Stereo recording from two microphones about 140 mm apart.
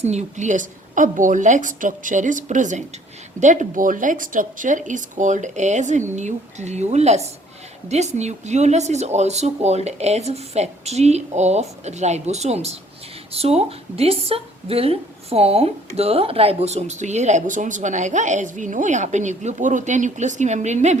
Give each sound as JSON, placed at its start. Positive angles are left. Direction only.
{"t": 0.0, "sound": "speech", "side_deg": -55}